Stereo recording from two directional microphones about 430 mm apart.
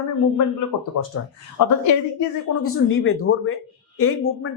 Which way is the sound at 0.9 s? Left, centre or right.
Left.